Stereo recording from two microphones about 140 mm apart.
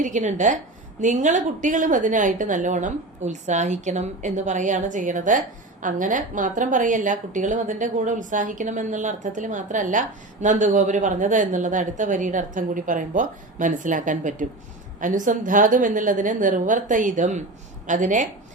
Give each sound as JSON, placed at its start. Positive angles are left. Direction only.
{"t": 0.0, "sound": "a woman's voice", "side_deg": -60}